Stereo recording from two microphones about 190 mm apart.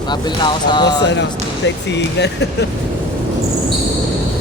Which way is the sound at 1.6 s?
65° left (ahead or behind).